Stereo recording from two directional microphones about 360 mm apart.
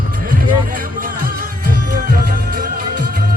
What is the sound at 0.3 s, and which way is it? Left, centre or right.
Music, right.